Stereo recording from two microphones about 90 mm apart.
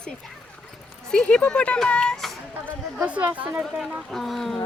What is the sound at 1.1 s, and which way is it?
A woman's voice, 15° left (ahead or behind).